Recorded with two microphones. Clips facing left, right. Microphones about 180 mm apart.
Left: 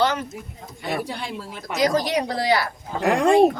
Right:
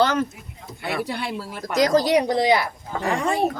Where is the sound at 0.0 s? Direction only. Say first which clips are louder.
Right 2 dB; 45° right (ahead or behind).